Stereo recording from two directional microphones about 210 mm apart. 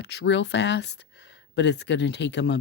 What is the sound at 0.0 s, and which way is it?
Speech, 55° left (ahead or behind).